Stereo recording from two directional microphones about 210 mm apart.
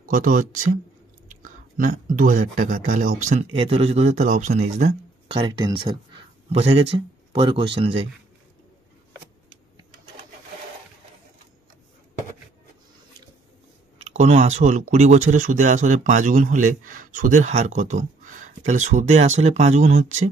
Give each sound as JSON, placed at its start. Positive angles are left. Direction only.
{"t": 0.1, "sound": "speech", "side_deg": -40}
{"t": 13.9, "sound": "speech", "side_deg": -30}